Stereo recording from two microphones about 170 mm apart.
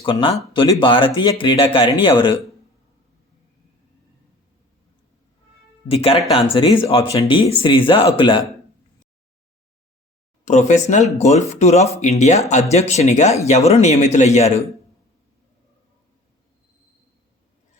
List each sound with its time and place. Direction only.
0.0 s speech: 30° left (ahead or behind)
5.9 s speech: 35° left (ahead or behind)
10.4 s speech: 45° left (ahead or behind)